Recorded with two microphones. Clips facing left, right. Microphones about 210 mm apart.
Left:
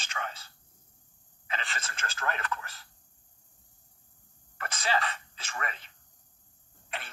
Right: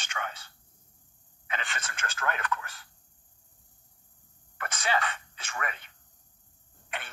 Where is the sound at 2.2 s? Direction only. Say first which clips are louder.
Right 2 dB; 30° left (ahead or behind).